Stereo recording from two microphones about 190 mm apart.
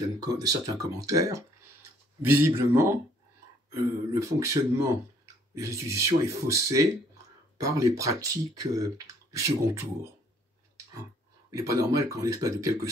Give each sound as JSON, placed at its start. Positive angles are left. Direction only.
{"t": 0.2, "sound": "speech", "side_deg": -20}
{"t": 11.5, "sound": "speech", "side_deg": -15}